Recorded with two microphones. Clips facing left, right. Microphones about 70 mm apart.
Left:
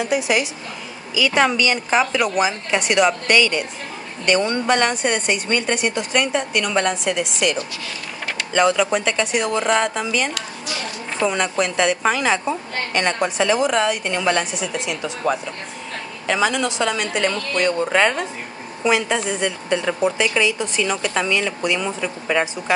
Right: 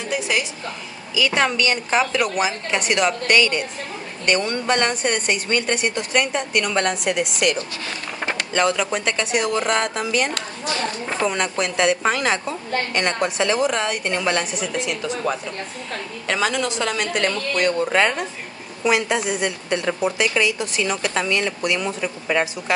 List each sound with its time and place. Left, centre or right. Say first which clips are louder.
0.0 s a woman's voice: left 4 dB; centre
1.1 s a woman's voice: left 2 dB; centre
8.5 s a woman's voice: left 4 dB; centre
10.3 s a sound: right 3 dB; right
11.2 s a woman's voice: left 3 dB; centre
16.3 s a woman's voice: left 2 dB; centre